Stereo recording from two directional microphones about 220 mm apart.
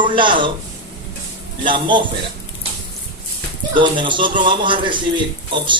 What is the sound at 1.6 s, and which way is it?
Speech, 20° right (ahead or behind).